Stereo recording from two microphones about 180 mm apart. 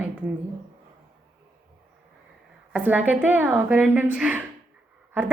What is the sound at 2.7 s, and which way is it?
A woman's voice, 10° right (ahead or behind).